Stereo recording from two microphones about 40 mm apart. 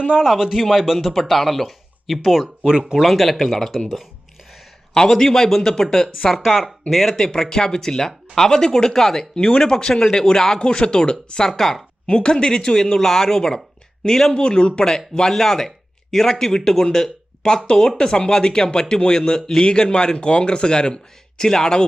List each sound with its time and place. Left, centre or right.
0.2 s a man's voice: centre
0.9 s speech: centre
4.9 s speech: centre
6.4 s speech: centre
7.2 s speech: centre
9.3 s speech: centre
11.4 s speech: centre
12.0 s speech: left